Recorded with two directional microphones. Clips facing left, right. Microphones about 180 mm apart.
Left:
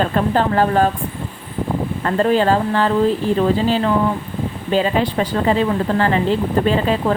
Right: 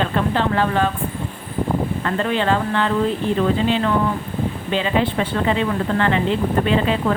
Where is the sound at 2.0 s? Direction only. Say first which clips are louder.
Left 5 dB; 35° left (ahead or behind).